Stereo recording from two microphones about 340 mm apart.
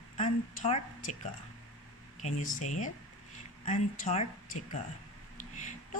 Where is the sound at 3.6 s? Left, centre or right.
Left.